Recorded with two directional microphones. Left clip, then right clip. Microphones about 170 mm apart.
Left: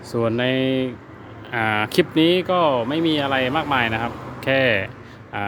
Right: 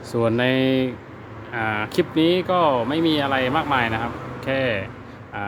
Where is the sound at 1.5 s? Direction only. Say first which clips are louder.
Left 3 dB; 25° left (ahead or behind).